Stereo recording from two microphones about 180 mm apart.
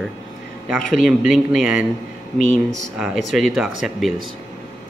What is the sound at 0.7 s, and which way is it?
Speech, centre (ahead or behind).